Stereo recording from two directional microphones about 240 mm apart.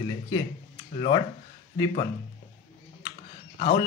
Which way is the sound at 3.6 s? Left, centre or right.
Left.